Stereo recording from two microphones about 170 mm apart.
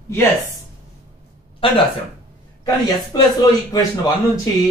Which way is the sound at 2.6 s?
20° left (ahead or behind).